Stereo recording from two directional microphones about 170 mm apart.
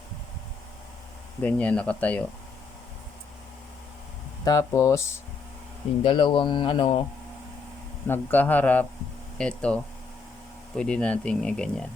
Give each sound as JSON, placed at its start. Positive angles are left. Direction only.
{"t": 1.4, "sound": "a man's voice", "side_deg": 10}
{"t": 4.4, "sound": "a man's voice", "side_deg": 20}
{"t": 6.0, "sound": "speech", "side_deg": 30}
{"t": 8.0, "sound": "a man's voice", "side_deg": 10}